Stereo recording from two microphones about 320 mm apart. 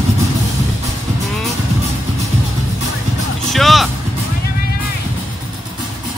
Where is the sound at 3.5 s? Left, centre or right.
Centre.